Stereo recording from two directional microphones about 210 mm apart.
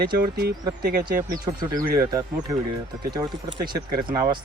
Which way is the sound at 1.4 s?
15° right (ahead or behind).